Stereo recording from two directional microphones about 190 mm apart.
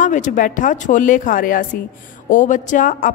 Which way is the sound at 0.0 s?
40° left (ahead or behind).